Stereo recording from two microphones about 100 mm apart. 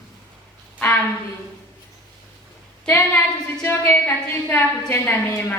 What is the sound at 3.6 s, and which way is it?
A woman's voice, 20° left (ahead or behind).